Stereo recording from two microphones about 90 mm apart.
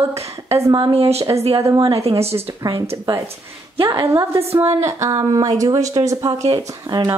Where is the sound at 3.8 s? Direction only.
35° right (ahead or behind).